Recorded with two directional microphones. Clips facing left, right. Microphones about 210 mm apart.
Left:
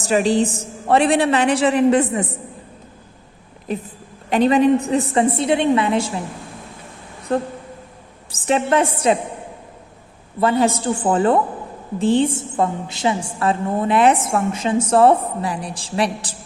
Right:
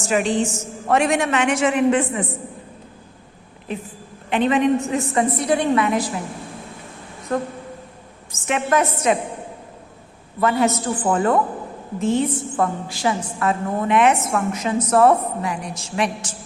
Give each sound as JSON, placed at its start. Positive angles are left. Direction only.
{"t": 0.0, "sound": "a woman's voice", "side_deg": 35}
{"t": 3.7, "sound": "a woman's voice", "side_deg": 40}
{"t": 7.3, "sound": "a woman's voice", "side_deg": 30}
{"t": 10.4, "sound": "a woman's voice", "side_deg": 30}